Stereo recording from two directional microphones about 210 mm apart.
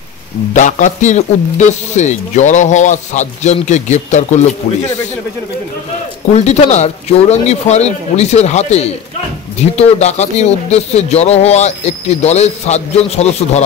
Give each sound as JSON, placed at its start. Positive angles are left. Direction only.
{"t": 0.5, "sound": "speech", "side_deg": 35}
{"t": 6.3, "sound": "speech", "side_deg": 30}